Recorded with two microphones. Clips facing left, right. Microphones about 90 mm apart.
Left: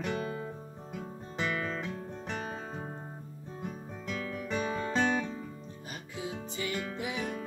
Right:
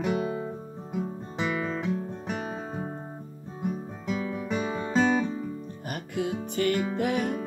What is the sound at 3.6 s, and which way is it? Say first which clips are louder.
Guitar: right 9 dB; 15° right (ahead or behind).